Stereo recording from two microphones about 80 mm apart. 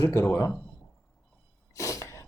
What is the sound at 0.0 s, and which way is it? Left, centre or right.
Speech, left.